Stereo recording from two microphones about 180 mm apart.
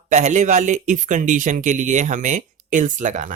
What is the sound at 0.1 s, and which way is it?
Speech, 40° right (ahead or behind).